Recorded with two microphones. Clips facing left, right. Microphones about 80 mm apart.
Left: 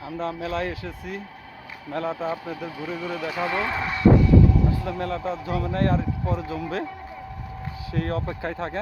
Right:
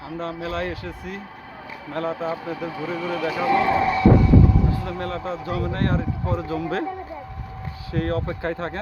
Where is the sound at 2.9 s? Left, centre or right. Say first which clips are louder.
Right 3 dB; right.